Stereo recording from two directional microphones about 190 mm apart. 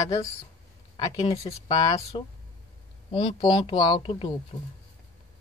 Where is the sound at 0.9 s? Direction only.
20° left (ahead or behind).